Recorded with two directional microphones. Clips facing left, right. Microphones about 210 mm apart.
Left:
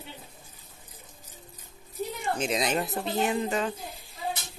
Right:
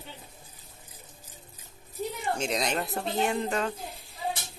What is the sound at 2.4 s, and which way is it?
Speech, centre (ahead or behind).